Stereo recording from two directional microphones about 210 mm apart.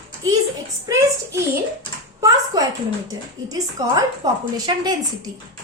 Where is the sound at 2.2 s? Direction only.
15° right (ahead or behind).